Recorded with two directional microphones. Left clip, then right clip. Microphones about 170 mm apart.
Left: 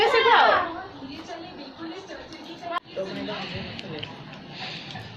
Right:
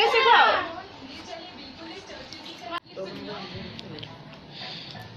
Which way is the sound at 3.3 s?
Centre (ahead or behind).